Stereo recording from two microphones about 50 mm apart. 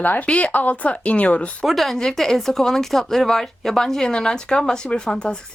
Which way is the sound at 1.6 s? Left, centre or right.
Centre.